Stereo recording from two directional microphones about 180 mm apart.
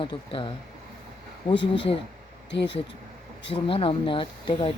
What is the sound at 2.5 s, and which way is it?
Speech, 70° left (ahead or behind).